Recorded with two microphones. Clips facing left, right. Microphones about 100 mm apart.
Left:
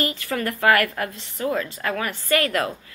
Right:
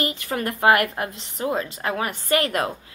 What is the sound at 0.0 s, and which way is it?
A woman's voice, 20° right (ahead or behind).